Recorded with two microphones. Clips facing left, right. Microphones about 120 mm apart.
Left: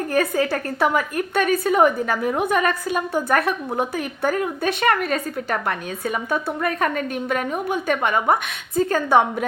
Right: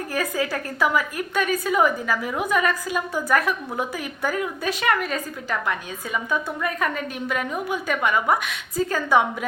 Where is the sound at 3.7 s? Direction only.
45° left (ahead or behind).